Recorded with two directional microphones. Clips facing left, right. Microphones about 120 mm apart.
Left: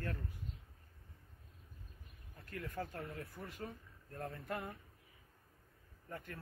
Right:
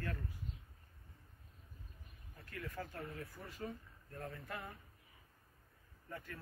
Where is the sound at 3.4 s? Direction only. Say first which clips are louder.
Left 3 dB; 5° left (ahead or behind).